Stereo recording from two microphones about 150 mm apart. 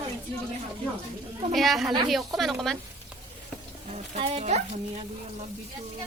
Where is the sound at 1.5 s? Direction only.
Centre (ahead or behind).